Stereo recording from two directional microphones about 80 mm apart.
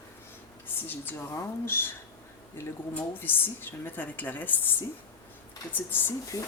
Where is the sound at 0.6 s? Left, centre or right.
Left.